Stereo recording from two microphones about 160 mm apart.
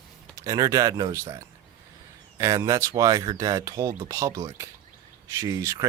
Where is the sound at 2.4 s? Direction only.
20° right (ahead or behind).